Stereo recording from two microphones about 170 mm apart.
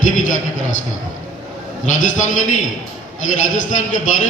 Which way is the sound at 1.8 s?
50° left (ahead or behind).